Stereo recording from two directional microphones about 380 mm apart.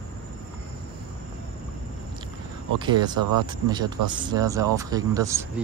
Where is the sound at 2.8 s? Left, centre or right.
Centre.